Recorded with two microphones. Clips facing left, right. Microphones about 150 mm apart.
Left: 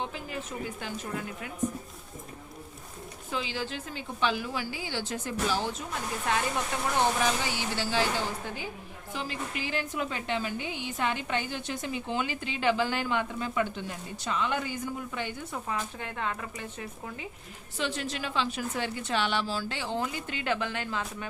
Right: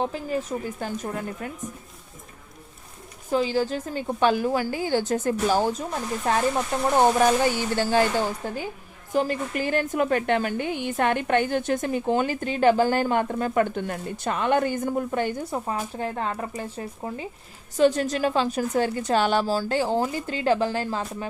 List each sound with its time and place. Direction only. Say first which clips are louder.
0.0 s a woman's voice: right 9 dB; 40° right (ahead or behind)
3.2 s a woman's voice: right 11 dB; 40° right (ahead or behind)